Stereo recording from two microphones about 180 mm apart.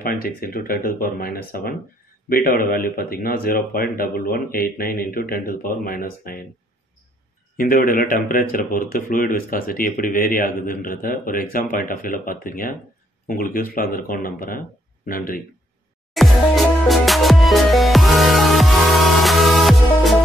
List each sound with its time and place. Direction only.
0.0 s speech: 55° left (ahead or behind)
7.5 s speech: 50° left (ahead or behind)
16.1 s music: centre (ahead or behind)